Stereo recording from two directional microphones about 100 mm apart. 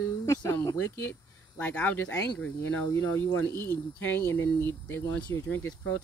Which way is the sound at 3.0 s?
25° left (ahead or behind).